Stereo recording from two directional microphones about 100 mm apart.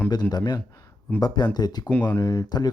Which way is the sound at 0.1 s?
45° left (ahead or behind).